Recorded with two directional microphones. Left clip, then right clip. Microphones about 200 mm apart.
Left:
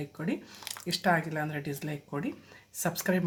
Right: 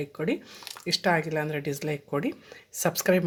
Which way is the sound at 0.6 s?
5° left (ahead or behind).